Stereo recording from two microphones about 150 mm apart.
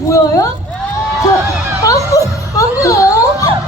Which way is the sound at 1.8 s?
20° left (ahead or behind).